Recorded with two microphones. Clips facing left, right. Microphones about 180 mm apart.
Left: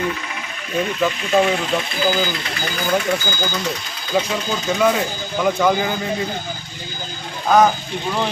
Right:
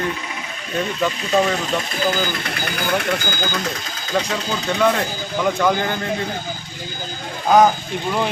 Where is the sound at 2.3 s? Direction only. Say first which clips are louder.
Even; 55° right (ahead or behind).